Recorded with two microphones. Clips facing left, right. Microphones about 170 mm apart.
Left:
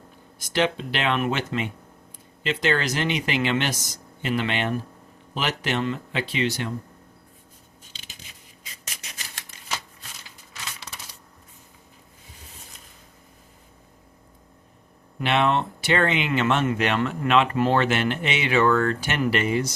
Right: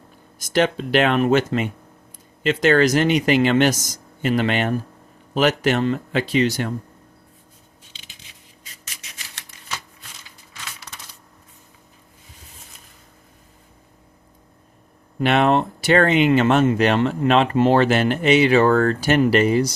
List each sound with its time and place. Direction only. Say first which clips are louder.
0.3 s speech: right 4 dB; 45° right (ahead or behind)
15.2 s speech: right 5 dB; 45° right (ahead or behind)